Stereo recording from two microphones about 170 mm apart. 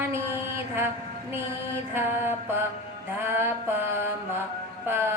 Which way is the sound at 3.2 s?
15° right (ahead or behind).